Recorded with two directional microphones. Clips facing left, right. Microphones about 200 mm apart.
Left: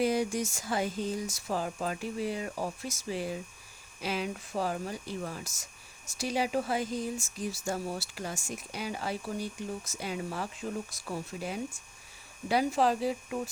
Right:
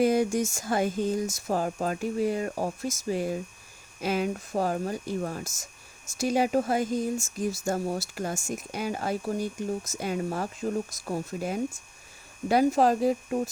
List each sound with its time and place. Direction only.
0.0 s speech: 50° right (ahead or behind)